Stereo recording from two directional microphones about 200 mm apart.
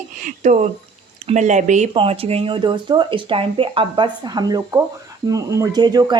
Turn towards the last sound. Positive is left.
turn(degrees=-20)  # may be behind; listen again after turning